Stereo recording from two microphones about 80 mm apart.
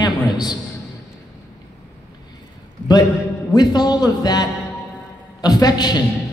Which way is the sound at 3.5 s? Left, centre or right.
Left.